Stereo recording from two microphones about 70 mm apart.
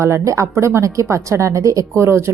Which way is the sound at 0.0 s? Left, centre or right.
Right.